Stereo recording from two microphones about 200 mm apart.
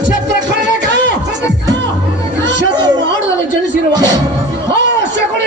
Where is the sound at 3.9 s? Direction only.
20° right (ahead or behind).